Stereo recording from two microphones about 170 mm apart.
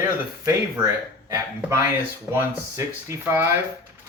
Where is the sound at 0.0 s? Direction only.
15° right (ahead or behind).